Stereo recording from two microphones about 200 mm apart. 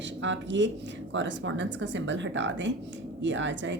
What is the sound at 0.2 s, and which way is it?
A woman's voice, 65° right (ahead or behind).